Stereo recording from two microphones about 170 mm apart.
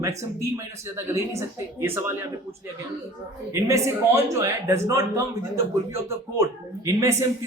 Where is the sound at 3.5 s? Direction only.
20° right (ahead or behind).